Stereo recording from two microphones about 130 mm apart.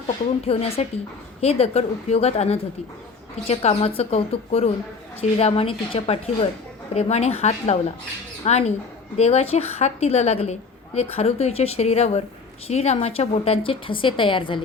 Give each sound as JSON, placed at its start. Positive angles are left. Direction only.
{"t": 0.4, "sound": "a woman's voice", "side_deg": 50}